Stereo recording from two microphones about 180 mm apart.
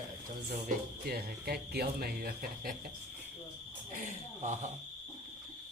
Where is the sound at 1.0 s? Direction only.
60° right (ahead or behind).